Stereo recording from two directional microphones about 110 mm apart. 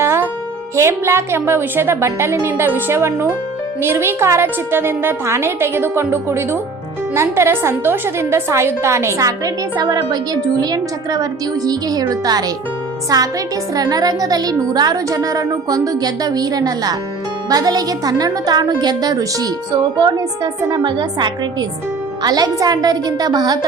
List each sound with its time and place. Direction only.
0.0 s music: 25° right (ahead or behind)
0.8 s a woman's voice: 25° right (ahead or behind)